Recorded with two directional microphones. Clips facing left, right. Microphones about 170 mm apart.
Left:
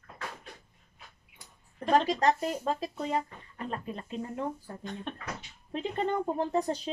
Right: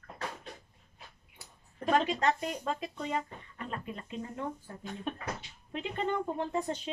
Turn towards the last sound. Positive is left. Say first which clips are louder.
# left 4 dB
turn(degrees=35)  # may be behind; listen again after turning